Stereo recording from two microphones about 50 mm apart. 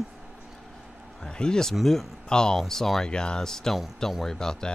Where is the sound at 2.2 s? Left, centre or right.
Centre.